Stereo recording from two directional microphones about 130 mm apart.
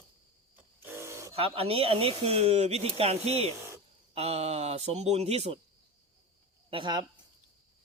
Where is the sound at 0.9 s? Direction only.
20° right (ahead or behind).